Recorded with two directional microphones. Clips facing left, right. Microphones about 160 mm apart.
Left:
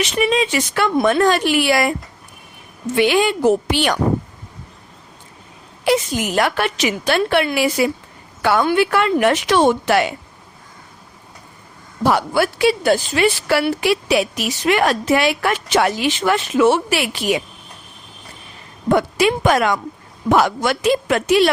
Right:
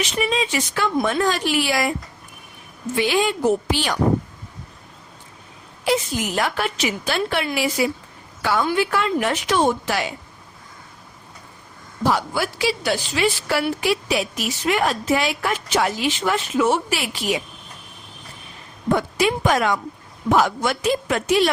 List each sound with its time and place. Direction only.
0.0 s speech: 65° left (ahead or behind)
2.9 s a woman's voice: 65° left (ahead or behind)
5.8 s a woman's voice: 70° left (ahead or behind)
12.0 s a woman's voice: 65° left (ahead or behind)
18.9 s a woman's voice: 75° left (ahead or behind)
20.3 s a woman's voice: 85° left